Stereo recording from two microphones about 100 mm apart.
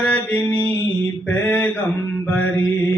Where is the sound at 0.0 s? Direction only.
10° left (ahead or behind).